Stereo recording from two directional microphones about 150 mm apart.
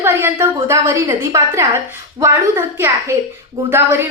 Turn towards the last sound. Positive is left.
turn(degrees=-15)  # may be behind; listen again after turning